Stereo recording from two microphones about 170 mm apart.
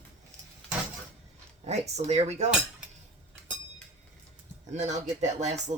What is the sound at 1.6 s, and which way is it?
Speech, 40° right (ahead or behind).